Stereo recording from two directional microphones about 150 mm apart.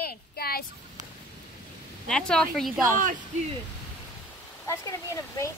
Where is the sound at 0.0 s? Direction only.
85° left.